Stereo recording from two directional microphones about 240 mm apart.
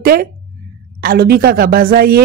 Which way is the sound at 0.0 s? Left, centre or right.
Right.